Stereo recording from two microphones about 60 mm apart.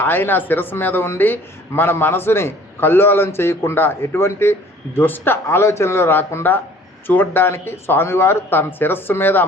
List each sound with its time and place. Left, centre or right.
0.0 s a man's voice: left